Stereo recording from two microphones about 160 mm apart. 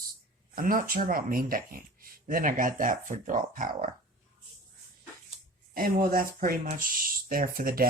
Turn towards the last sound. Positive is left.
turn(degrees=-65)  # may be behind; listen again after turning